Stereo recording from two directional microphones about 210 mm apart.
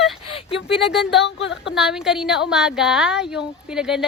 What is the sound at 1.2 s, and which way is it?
Speech, 55° left (ahead or behind).